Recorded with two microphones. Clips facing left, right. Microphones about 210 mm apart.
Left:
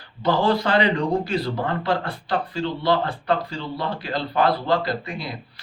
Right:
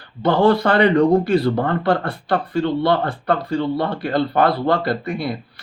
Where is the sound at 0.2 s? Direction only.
55° right (ahead or behind).